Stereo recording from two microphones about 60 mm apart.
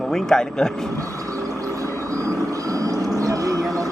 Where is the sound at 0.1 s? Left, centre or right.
Centre.